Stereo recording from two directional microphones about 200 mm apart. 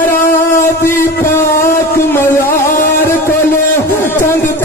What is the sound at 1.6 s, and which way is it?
Music, 45° left (ahead or behind).